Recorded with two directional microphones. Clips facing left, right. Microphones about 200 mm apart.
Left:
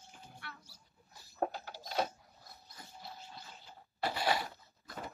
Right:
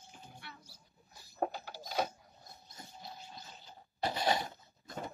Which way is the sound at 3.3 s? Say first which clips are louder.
Even; 20° right (ahead or behind).